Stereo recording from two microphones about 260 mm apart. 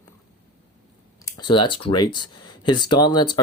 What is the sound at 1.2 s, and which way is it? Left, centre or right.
Speech, centre.